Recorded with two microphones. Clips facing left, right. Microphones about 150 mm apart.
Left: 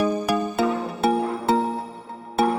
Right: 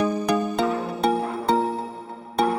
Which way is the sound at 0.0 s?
5° left (ahead or behind).